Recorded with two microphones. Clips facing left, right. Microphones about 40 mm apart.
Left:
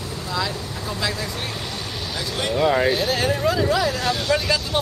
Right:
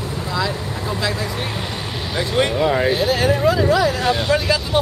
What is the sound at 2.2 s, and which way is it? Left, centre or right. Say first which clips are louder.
Speech: right 8 dB; right.